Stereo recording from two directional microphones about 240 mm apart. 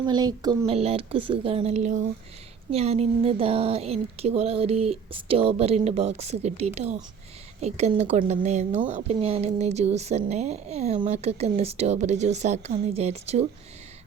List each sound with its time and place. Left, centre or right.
0.0 s speech: centre